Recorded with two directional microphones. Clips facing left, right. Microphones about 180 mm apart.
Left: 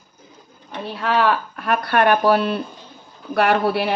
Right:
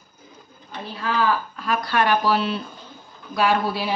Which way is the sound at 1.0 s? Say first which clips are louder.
Left 3 dB; 70° left (ahead or behind).